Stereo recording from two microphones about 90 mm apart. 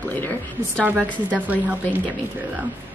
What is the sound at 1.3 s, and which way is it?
Speech, 20° right (ahead or behind).